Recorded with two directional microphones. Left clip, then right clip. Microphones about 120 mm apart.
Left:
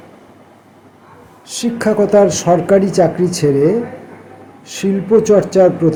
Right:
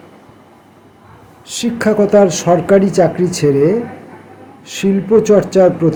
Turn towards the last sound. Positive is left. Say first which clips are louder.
# even
turn(degrees=-15)  # may be behind; listen again after turning